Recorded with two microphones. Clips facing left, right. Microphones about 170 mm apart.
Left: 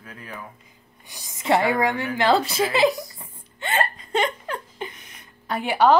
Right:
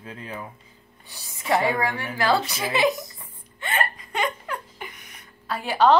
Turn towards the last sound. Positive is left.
turn(degrees=10)  # may be behind; listen again after turning